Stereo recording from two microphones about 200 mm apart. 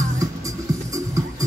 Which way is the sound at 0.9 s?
15° right (ahead or behind).